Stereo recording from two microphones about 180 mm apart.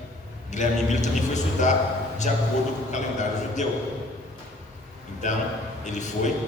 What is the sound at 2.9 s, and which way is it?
Speech, 40° left (ahead or behind).